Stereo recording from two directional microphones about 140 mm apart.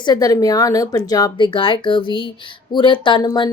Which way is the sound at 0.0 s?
30° left (ahead or behind).